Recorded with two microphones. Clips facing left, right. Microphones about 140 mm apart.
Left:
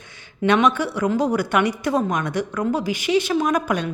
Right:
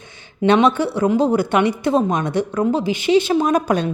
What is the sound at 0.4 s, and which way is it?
A woman's voice, 30° right (ahead or behind).